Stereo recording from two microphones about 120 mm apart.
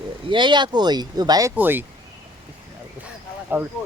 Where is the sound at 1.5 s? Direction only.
15° right (ahead or behind).